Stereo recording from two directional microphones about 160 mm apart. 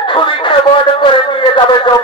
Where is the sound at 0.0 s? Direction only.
30° left (ahead or behind).